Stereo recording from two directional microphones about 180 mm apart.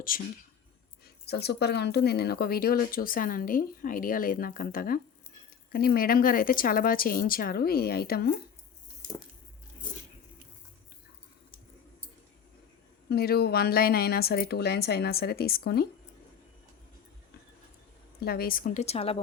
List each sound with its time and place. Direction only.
0.1 s speech: 50° left (ahead or behind)
1.0 s speech: 65° left (ahead or behind)
13.1 s speech: 60° left (ahead or behind)
18.2 s speech: 60° left (ahead or behind); by 19.2 s 35° left (ahead or behind)